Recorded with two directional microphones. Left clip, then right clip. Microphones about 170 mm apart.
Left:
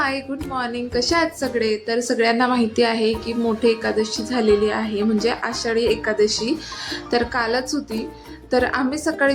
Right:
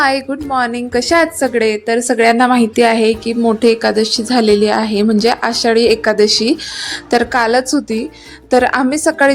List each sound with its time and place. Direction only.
0.0 s a woman's voice: 55° right (ahead or behind)